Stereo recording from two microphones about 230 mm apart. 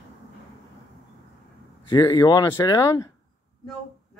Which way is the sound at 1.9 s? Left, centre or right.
Centre.